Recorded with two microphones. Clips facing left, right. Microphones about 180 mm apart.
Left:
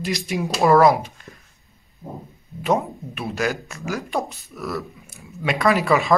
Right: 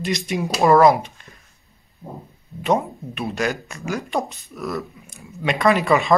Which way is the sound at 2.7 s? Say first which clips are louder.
Right 1 dB; 5° left (ahead or behind).